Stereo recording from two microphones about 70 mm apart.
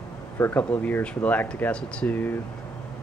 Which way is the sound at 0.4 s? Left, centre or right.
Left.